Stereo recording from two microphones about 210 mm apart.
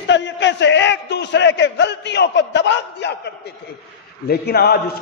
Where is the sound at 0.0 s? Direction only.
60° left (ahead or behind).